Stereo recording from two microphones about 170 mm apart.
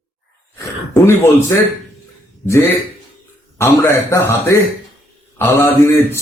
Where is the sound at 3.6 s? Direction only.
15° left (ahead or behind).